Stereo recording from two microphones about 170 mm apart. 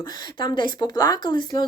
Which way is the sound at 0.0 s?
25° left (ahead or behind).